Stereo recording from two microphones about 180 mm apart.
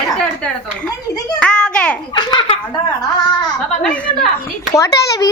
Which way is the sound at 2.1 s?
25° left (ahead or behind).